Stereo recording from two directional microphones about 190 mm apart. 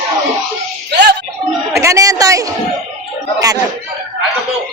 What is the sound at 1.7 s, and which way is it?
Speech, 15° right (ahead or behind).